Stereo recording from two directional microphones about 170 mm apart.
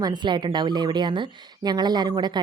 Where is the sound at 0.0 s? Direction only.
25° right (ahead or behind).